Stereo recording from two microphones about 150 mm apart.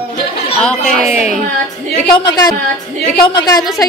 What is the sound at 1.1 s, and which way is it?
Speech, 50° left (ahead or behind).